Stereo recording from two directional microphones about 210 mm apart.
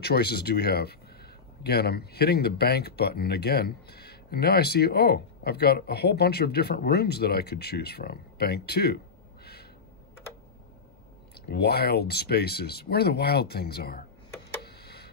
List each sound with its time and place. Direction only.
0.0 s speech: 50° left (ahead or behind)
11.4 s speech: 50° left (ahead or behind)
14.6 s a sound: 50° left (ahead or behind)